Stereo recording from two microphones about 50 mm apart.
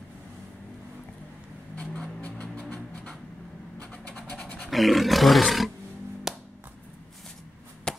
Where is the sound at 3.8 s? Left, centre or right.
Left.